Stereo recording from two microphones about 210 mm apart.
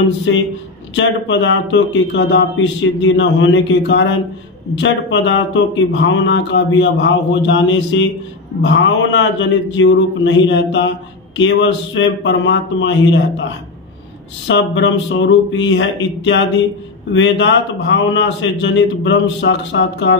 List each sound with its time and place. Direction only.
0.3 s speech: 60° left (ahead or behind)
14.5 s speech: 60° left (ahead or behind)